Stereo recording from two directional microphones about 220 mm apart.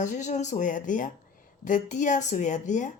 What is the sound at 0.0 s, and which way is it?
A woman's voice, 35° left (ahead or behind).